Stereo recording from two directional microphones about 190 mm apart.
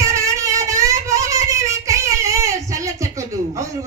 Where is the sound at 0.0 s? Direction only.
15° right (ahead or behind).